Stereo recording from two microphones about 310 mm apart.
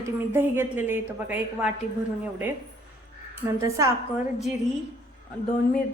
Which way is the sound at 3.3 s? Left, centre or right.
Centre.